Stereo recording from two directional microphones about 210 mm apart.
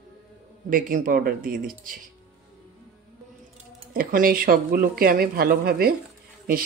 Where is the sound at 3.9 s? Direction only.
45° right (ahead or behind).